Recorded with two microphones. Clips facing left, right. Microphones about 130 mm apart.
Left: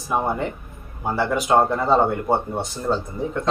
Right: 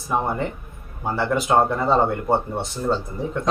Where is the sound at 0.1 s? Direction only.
Centre (ahead or behind).